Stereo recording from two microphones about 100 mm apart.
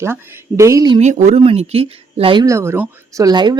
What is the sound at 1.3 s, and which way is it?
Speech, 90° right.